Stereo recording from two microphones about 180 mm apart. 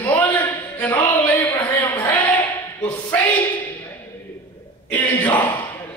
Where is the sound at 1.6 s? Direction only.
10° left (ahead or behind).